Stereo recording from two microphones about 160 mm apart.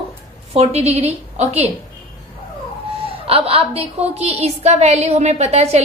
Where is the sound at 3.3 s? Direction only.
35° right (ahead or behind).